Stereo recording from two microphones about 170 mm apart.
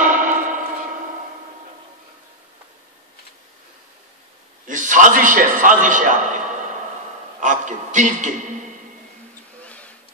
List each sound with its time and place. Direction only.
0.0 s a sound: 50° right (ahead or behind)
4.6 s a man's voice: 50° right (ahead or behind)
9.6 s music: 10° left (ahead or behind)